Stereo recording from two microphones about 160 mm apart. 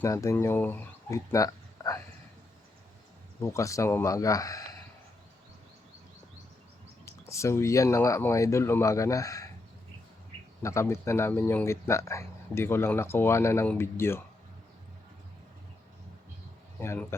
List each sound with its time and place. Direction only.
0.0 s speech: 20° left (ahead or behind)
3.4 s speech: 20° left (ahead or behind)
7.0 s speech: 20° left (ahead or behind)
10.6 s speech: 20° left (ahead or behind)
16.8 s speech: 15° left (ahead or behind)